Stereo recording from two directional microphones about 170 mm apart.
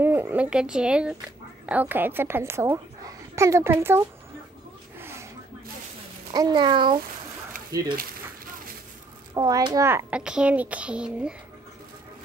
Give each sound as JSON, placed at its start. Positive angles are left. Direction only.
{"t": 0.0, "sound": "a sound", "side_deg": -10}
{"t": 1.7, "sound": "a child's voice", "side_deg": -10}
{"t": 4.9, "sound": "snake", "side_deg": -15}
{"t": 6.3, "sound": "a child's voice", "side_deg": -25}
{"t": 9.3, "sound": "a child's voice", "side_deg": -20}